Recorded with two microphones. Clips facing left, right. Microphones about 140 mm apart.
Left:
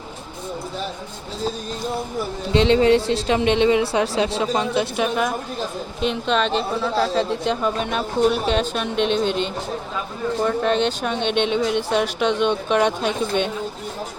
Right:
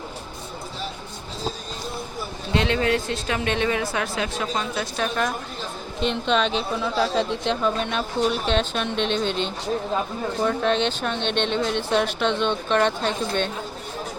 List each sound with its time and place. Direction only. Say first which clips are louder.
2.5 s speech: left 7 dB; 25° left (ahead or behind)
6.0 s speech: left 1 dB; centre (ahead or behind)